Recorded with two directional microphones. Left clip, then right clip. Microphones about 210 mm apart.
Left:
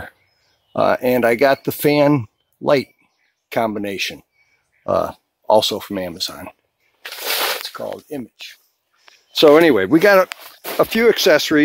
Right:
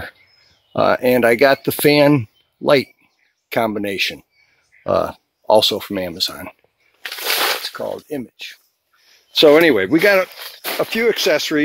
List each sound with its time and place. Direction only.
0.7 s speech: centre (ahead or behind)
7.2 s a sound: 20° right (ahead or behind)
9.4 s speech: 25° left (ahead or behind)
10.8 s speech: 40° left (ahead or behind)